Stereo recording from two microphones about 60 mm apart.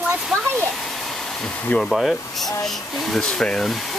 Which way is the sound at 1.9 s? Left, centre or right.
Centre.